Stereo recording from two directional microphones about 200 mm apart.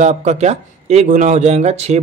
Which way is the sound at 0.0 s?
35° right (ahead or behind).